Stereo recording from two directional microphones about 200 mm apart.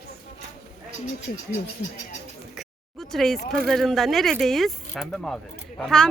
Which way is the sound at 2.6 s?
Centre (ahead or behind).